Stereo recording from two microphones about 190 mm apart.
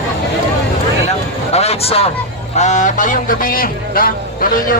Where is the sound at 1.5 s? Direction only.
35° left (ahead or behind).